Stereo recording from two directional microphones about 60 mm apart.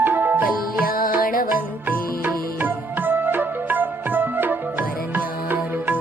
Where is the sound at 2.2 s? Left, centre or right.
Right.